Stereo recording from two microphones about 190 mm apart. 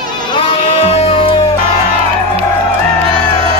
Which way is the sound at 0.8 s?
30° left (ahead or behind).